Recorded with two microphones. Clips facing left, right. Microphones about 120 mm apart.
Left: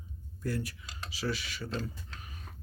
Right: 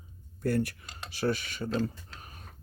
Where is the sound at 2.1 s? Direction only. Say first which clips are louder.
Even; 45° right (ahead or behind).